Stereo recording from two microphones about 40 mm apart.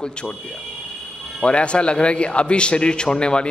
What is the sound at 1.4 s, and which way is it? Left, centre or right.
A man's voice, left.